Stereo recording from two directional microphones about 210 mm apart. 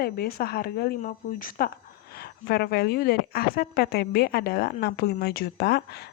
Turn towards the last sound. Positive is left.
turn(degrees=50)  # may be behind; listen again after turning